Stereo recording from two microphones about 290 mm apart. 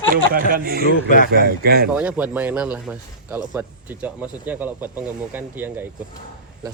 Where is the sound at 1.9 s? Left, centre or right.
Centre.